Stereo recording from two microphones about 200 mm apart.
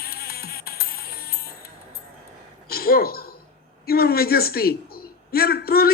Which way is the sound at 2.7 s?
50° left (ahead or behind).